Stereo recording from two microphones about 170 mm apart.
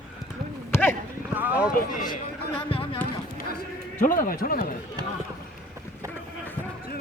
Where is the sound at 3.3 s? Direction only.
55° left (ahead or behind).